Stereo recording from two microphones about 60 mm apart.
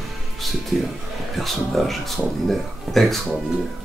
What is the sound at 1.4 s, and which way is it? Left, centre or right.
Speech, centre.